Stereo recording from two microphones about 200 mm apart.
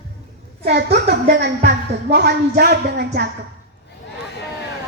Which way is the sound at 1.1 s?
55° right (ahead or behind).